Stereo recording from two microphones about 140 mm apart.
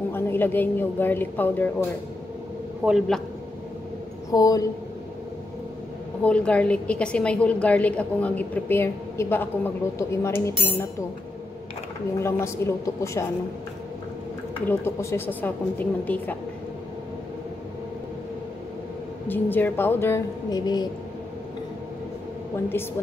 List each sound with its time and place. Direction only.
0.1 s a woman's voice: 15° left (ahead or behind)
2.8 s a man's voice: 10° right (ahead or behind)
4.3 s a woman's voice: 25° left (ahead or behind)
6.2 s a woman's voice: 10° left (ahead or behind)
12.2 s a woman's voice: 20° left (ahead or behind)
14.7 s a woman's voice: 20° left (ahead or behind)
19.2 s a woman's voice: 15° left (ahead or behind); by 20.9 s 30° left (ahead or behind)